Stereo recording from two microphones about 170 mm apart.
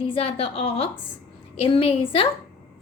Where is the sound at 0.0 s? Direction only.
35° left (ahead or behind).